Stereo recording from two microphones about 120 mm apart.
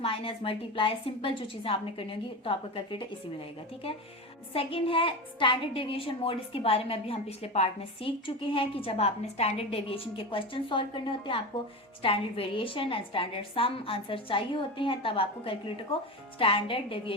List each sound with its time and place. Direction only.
0.0 s a woman's voice: 50° left (ahead or behind)
4.5 s a woman's voice: 50° left (ahead or behind)